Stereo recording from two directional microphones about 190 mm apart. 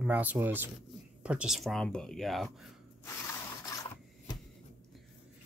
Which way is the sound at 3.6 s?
20° left (ahead or behind).